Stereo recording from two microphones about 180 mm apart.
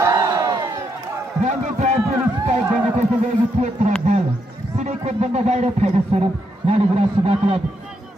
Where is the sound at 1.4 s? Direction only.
40° right (ahead or behind).